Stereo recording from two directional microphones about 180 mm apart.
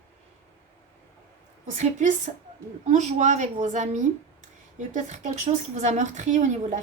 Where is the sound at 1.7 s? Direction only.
45° right (ahead or behind).